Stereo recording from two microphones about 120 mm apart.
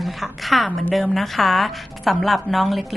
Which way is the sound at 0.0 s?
Centre (ahead or behind).